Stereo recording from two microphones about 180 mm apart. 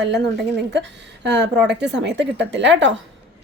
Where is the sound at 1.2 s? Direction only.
75° right (ahead or behind).